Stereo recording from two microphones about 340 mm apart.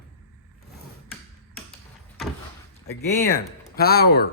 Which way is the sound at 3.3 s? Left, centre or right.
Left.